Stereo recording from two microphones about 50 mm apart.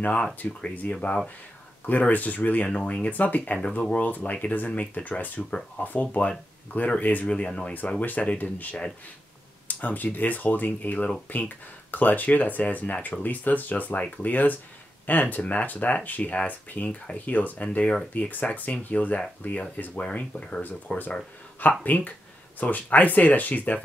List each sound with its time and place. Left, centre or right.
0.0 s speech: left
7.2 s speech: left
8.0 s speech: left
9.7 s speech: left
20.0 s speech: left
21.8 s speech: left